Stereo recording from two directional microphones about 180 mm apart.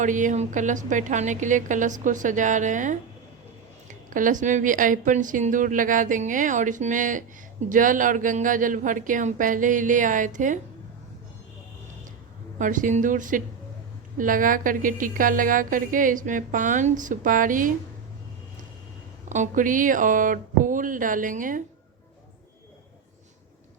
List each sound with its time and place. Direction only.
0.0 s a woman's voice: 45° right (ahead or behind)
12.5 s a woman's voice: 45° right (ahead or behind)
19.3 s a woman's voice: 45° right (ahead or behind)